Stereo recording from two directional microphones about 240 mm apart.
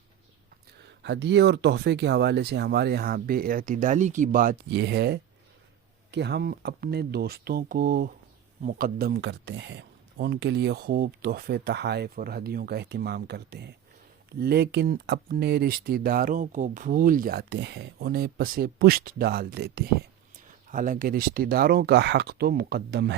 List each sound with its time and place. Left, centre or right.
1.0 s speech: right